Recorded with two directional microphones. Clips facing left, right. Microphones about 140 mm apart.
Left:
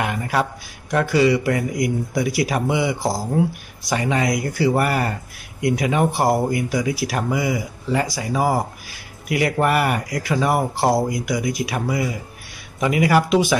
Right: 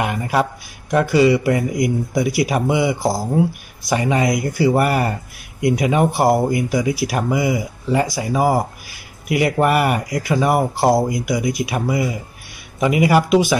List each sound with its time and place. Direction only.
0.0 s speech: 15° right (ahead or behind)